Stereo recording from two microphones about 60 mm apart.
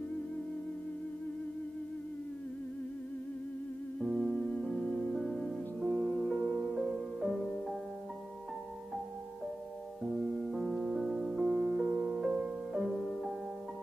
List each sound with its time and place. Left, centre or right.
4.1 s music: centre
10.0 s music: centre
12.7 s music: centre